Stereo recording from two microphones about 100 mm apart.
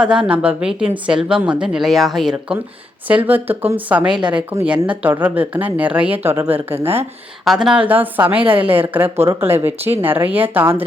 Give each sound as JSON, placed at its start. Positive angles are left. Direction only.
{"t": 0.0, "sound": "a woman's voice", "side_deg": -10}
{"t": 3.1, "sound": "a woman's voice", "side_deg": -15}
{"t": 7.4, "sound": "speech", "side_deg": -5}
{"t": 7.9, "sound": "a woman's voice", "side_deg": -20}